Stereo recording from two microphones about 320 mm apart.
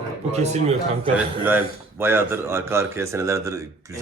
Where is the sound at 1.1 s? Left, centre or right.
Centre.